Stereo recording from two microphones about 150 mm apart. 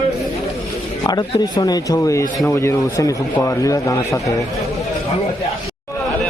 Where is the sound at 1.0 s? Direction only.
25° left (ahead or behind).